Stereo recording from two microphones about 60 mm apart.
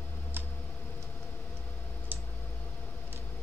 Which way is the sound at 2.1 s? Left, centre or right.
Right.